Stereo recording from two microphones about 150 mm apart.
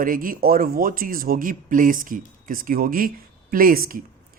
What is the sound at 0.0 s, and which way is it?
A man's voice, 65° right (ahead or behind).